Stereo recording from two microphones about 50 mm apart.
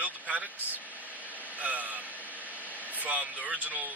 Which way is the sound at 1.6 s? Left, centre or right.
Right.